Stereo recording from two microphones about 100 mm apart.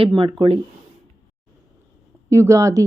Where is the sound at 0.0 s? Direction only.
55° right (ahead or behind).